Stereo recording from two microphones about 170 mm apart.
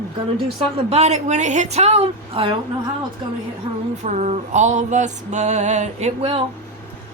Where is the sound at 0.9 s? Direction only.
40° right (ahead or behind).